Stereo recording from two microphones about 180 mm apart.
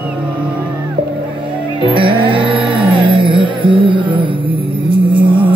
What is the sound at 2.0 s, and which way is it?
Music, 30° right (ahead or behind).